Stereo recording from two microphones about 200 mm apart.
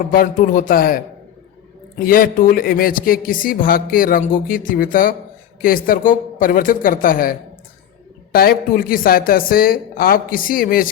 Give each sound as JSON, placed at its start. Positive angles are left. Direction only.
{"t": 0.1, "sound": "speech", "side_deg": 45}
{"t": 2.0, "sound": "speech", "side_deg": 45}